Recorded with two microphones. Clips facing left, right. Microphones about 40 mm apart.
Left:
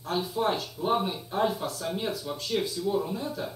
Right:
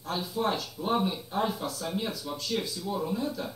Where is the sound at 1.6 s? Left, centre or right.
Left.